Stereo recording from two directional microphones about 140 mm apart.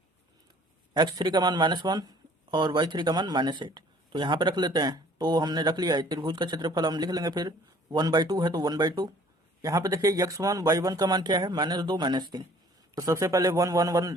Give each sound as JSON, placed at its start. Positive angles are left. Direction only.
{"t": 0.9, "sound": "speech", "side_deg": -30}